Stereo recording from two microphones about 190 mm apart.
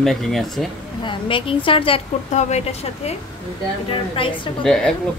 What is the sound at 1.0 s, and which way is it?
A woman's voice, 25° left (ahead or behind).